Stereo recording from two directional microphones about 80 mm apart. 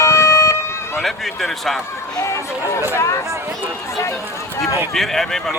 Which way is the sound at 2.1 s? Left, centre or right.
Left.